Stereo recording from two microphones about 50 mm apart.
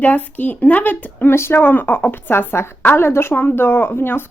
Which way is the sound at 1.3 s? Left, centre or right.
Left.